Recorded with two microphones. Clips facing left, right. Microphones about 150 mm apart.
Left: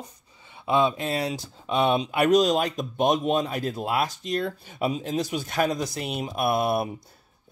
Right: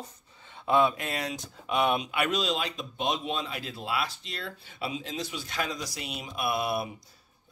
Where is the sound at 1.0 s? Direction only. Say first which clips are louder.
Left 6 dB; 30° left (ahead or behind).